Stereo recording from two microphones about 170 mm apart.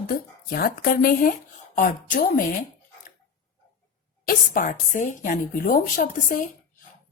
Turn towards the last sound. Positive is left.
turn(degrees=50)  # may be behind; listen again after turning